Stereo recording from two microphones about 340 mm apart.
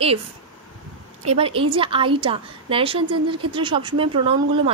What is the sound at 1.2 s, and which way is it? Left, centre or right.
Speech, centre.